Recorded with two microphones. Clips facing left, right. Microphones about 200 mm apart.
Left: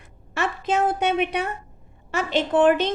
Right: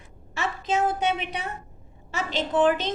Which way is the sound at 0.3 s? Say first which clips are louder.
Left 3 dB; 60° left (ahead or behind).